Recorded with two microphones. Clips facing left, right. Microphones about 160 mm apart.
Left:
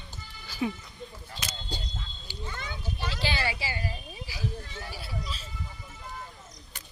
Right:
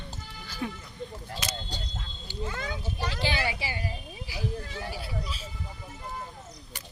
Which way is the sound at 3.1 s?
20° right (ahead or behind).